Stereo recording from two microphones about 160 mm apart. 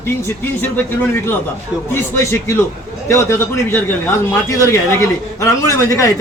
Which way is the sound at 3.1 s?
15° left (ahead or behind).